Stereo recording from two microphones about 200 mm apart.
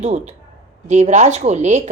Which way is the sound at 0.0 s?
35° right (ahead or behind).